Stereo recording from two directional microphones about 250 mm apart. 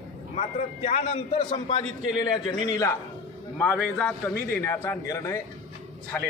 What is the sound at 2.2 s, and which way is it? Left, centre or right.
A man's voice, centre.